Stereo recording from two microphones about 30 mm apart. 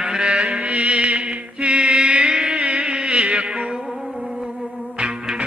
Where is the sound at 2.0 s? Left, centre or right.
Right.